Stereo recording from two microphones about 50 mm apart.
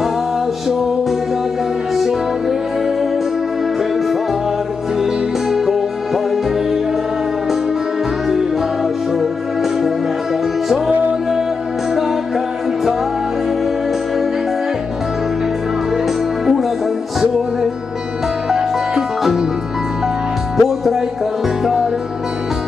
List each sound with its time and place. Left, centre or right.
5.5 s music: centre
9.2 s music: centre
18.5 s music: centre
20.5 s music: centre